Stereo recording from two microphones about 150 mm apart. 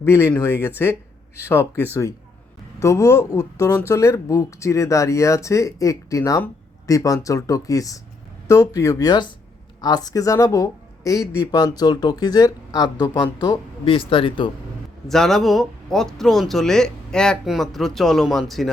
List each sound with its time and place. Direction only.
0.0 s speech: 15° left (ahead or behind)
13.8 s speech: 35° left (ahead or behind)
15.0 s speech: 5° left (ahead or behind)